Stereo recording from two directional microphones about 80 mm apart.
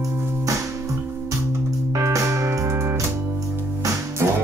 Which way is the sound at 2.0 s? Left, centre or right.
Right.